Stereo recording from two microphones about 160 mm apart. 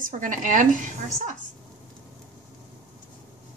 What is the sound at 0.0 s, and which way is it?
Speech, 55° right (ahead or behind).